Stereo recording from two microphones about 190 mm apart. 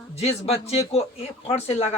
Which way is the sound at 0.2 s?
35° left (ahead or behind).